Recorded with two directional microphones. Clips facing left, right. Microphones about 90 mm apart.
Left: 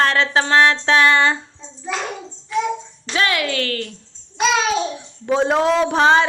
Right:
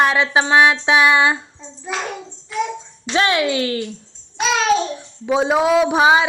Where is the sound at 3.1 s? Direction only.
25° right (ahead or behind).